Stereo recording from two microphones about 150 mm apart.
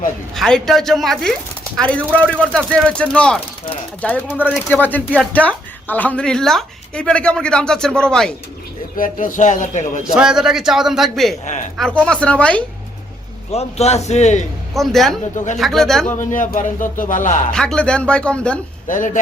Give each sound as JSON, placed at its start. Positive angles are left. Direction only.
{"t": 0.3, "sound": "a woman's voice", "side_deg": 5}
{"t": 9.0, "sound": "speech", "side_deg": 60}
{"t": 10.0, "sound": "a woman's voice", "side_deg": -5}
{"t": 13.5, "sound": "a man's voice", "side_deg": 45}
{"t": 14.7, "sound": "a woman's voice", "side_deg": 0}
{"t": 16.1, "sound": "speech", "side_deg": 60}
{"t": 17.5, "sound": "speech", "side_deg": 5}
{"t": 18.9, "sound": "speech", "side_deg": 60}